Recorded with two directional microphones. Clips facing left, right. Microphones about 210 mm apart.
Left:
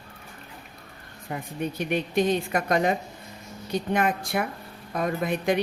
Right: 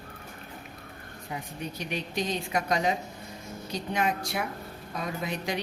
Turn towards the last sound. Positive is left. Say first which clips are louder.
# left 7 dB
turn(degrees=55)  # may be behind; listen again after turning